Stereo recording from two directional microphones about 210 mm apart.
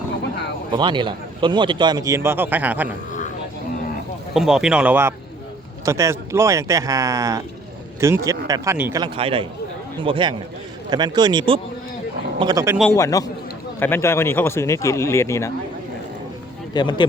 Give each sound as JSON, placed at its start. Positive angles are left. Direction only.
{"t": 0.7, "sound": "a man's voice", "side_deg": -20}
{"t": 4.4, "sound": "a man's voice", "side_deg": -5}
{"t": 12.9, "sound": "speech", "side_deg": 15}
{"t": 16.7, "sound": "speech", "side_deg": 20}